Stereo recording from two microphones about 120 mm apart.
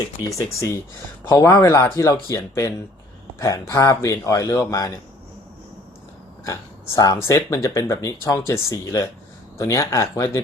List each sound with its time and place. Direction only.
0.3 s speech: 25° left (ahead or behind)
6.4 s speech: 30° left (ahead or behind)